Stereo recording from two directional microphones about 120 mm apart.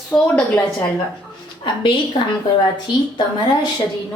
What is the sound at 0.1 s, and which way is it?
Speech, 5° left (ahead or behind).